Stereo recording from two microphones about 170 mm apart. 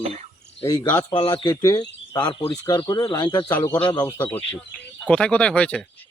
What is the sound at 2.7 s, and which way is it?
Speech, 25° left (ahead or behind).